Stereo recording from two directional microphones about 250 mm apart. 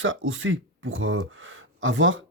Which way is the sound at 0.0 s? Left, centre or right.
Right.